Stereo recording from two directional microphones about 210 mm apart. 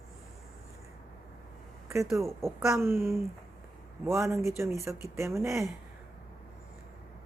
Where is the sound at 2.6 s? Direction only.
10° right (ahead or behind).